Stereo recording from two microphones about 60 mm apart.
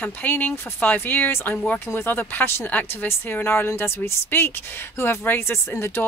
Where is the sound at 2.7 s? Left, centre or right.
Left.